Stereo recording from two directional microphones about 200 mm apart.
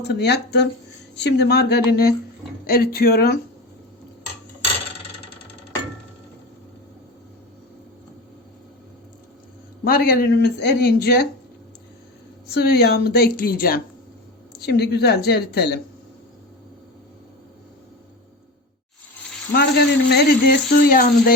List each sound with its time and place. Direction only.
0.1 s speech: 55° left (ahead or behind)
9.8 s speech: 50° left (ahead or behind)
12.5 s speech: 55° left (ahead or behind)
20.1 s speech: 50° left (ahead or behind)